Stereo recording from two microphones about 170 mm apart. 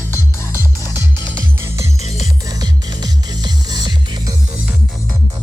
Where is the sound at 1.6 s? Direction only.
15° right (ahead or behind).